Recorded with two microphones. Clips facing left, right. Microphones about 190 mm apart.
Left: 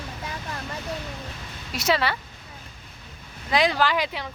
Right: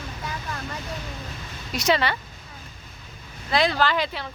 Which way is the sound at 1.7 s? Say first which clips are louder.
Right 1 dB; 5° left (ahead or behind).